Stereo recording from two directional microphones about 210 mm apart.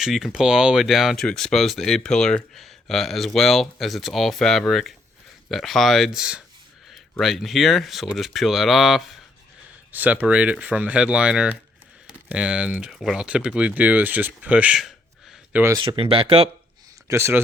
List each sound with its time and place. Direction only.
0.0 s speech: centre (ahead or behind)
15.5 s speech: 15° right (ahead or behind)
17.1 s speech: 10° right (ahead or behind)